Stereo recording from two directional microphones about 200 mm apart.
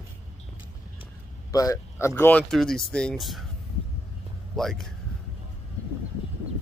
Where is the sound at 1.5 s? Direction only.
20° left (ahead or behind); by 3.4 s centre (ahead or behind).